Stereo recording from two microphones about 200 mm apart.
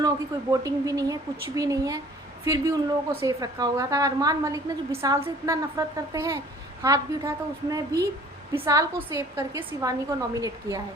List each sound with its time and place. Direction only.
0.5 s a woman's voice: 15° right (ahead or behind)